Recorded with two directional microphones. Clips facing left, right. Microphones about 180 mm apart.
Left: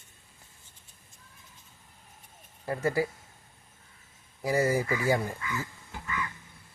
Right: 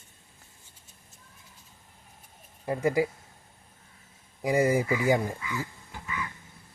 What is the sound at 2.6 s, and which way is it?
Speech, 15° right (ahead or behind).